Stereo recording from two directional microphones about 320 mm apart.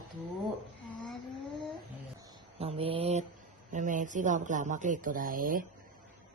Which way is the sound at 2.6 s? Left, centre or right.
Centre.